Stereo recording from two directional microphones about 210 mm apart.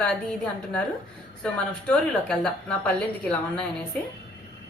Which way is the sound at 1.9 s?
5° left (ahead or behind).